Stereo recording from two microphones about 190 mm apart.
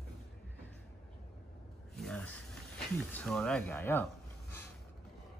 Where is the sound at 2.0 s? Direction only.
5° left (ahead or behind).